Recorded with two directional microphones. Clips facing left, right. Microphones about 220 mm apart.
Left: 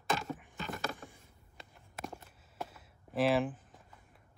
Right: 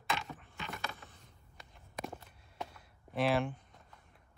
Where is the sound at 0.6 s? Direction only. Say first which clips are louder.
Left 3 dB; 45° left (ahead or behind).